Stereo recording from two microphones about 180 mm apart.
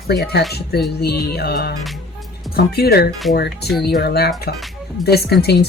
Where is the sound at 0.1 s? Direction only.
60° left (ahead or behind).